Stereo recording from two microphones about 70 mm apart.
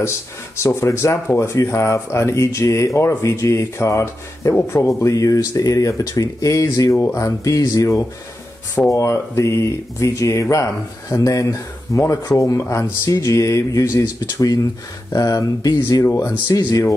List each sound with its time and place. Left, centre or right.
0.6 s speech: left
8.9 s speech: left
13.9 s speech: left
16.1 s speech: left
16.4 s speech: left